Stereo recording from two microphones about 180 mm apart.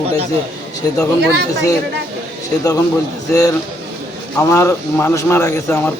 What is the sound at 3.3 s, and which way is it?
A man's voice, 20° left (ahead or behind).